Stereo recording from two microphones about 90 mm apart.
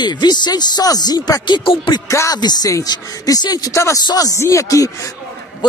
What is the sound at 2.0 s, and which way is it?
Speech, 35° left (ahead or behind).